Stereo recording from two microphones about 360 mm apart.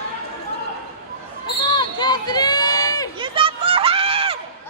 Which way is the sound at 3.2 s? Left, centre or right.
Centre.